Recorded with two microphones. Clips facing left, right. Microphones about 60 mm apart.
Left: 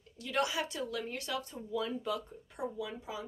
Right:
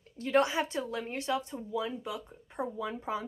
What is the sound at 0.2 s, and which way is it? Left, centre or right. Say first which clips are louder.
Speech: right 6 dB; right.